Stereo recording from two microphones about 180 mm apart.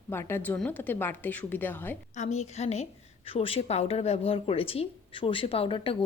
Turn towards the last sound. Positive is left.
turn(degrees=30)  # may be behind; listen again after turning